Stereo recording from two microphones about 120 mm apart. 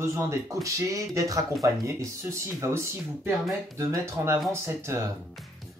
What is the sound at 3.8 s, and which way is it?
Speech, 25° right (ahead or behind).